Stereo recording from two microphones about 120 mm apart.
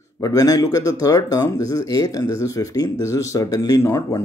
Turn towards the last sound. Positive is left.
turn(degrees=25)  # may be behind; listen again after turning